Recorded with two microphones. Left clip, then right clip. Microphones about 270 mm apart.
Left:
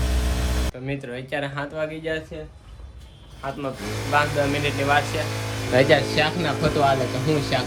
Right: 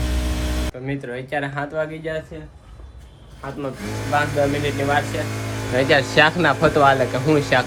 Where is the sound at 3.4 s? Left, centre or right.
Centre.